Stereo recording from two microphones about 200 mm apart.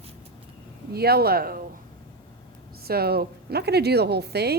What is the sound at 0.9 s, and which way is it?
Speech, 50° right (ahead or behind).